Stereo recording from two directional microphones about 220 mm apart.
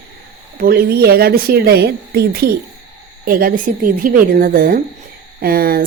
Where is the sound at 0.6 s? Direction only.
45° right (ahead or behind).